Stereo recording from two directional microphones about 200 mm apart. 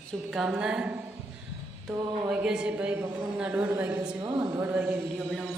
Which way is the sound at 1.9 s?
20° right (ahead or behind).